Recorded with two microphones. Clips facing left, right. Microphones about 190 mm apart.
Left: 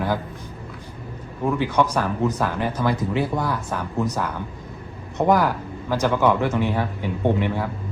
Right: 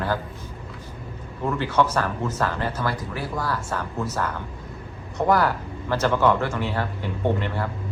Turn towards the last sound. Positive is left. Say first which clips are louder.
# left 3 dB
turn(degrees=10)  # may be behind; listen again after turning